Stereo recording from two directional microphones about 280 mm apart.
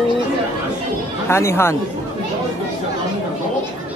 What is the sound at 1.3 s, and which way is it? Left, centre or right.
Speech, centre.